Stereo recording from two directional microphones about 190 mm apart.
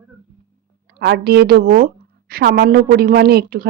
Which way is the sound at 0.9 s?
60° right (ahead or behind).